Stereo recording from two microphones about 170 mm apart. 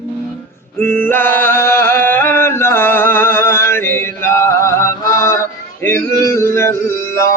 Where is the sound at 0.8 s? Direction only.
15° left (ahead or behind).